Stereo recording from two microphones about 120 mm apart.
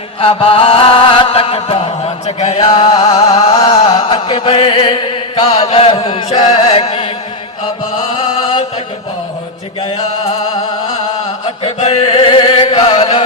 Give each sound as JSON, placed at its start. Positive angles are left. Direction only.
{"t": 0.2, "sound": "chant", "side_deg": 50}
{"t": 2.6, "sound": "chant", "side_deg": 45}
{"t": 8.1, "sound": "chant", "side_deg": 45}
{"t": 11.8, "sound": "chant", "side_deg": 55}